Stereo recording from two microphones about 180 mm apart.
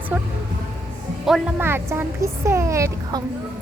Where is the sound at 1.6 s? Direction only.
15° right (ahead or behind).